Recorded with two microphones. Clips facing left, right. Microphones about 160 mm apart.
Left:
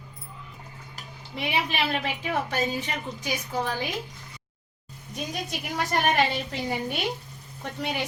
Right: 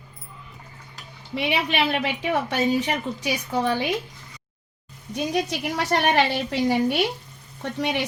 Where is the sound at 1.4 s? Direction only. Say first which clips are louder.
Right 4 dB; 75° right (ahead or behind).